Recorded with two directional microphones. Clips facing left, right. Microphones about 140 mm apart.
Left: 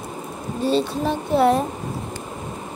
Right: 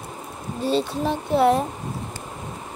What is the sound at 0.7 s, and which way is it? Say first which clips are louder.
Speech: left 2 dB; 15° right (ahead or behind).